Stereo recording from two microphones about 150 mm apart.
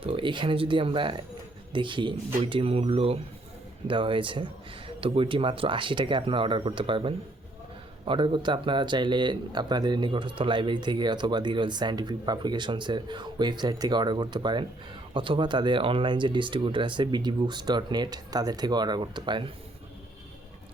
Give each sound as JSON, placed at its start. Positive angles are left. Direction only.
{"t": 0.0, "sound": "speech", "side_deg": -35}